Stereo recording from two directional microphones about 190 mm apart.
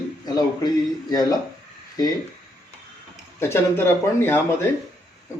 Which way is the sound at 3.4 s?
10° left (ahead or behind).